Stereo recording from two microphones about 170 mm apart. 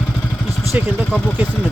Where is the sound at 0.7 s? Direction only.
10° right (ahead or behind).